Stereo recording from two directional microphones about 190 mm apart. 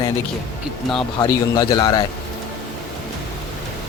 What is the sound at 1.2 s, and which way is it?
Speech, 20° left (ahead or behind).